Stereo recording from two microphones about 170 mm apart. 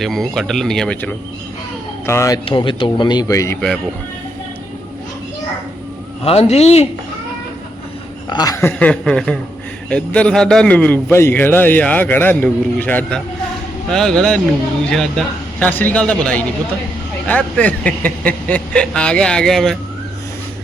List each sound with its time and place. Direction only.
0.0 s speech: centre (ahead or behind)
2.0 s a man's voice: 15° left (ahead or behind)
2.4 s speech: 30° left (ahead or behind)
6.2 s a man's voice: 35° left (ahead or behind)
8.3 s a man's voice: 20° left (ahead or behind); by 19.7 s centre (ahead or behind)